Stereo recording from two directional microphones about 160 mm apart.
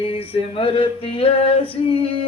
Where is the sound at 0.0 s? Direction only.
35° left (ahead or behind).